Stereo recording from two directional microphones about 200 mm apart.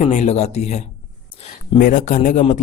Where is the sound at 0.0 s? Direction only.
35° left (ahead or behind).